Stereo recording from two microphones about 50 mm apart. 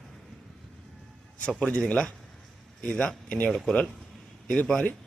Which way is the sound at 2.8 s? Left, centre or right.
Left.